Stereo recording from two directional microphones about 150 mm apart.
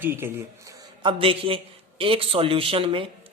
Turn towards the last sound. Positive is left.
turn(degrees=-35)  # may be behind; listen again after turning